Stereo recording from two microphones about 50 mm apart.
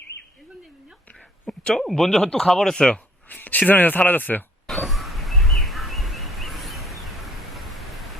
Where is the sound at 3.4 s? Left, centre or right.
Left.